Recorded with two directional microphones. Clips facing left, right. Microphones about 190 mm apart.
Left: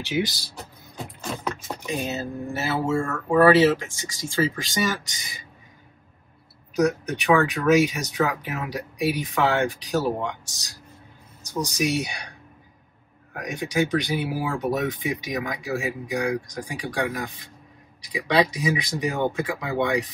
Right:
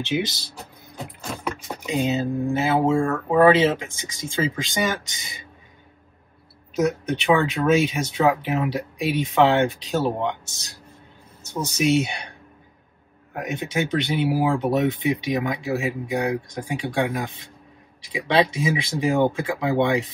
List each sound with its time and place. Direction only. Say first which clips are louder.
0.0 s speech: right 1 dB; 20° right (ahead or behind)
1.9 s speech: right 6 dB; 15° right (ahead or behind)
7.1 s speech: right 1 dB; 25° right (ahead or behind)
13.4 s speech: left 1 dB; 25° right (ahead or behind)